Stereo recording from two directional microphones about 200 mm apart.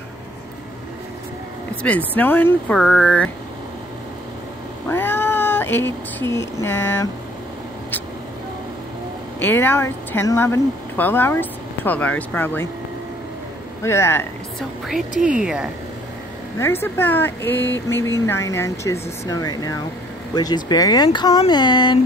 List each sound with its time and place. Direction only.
1.8 s speech: 5° left (ahead or behind)
4.8 s speech: 10° left (ahead or behind)
9.4 s speech: 10° left (ahead or behind)
13.8 s speech: 15° left (ahead or behind)
15.3 s speech: 5° right (ahead or behind)
16.5 s speech: 10° left (ahead or behind)